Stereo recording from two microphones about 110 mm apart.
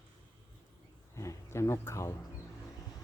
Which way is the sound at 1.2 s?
25° left (ahead or behind).